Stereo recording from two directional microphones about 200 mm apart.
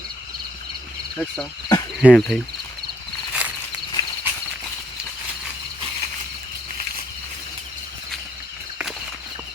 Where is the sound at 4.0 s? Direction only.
20° left (ahead or behind).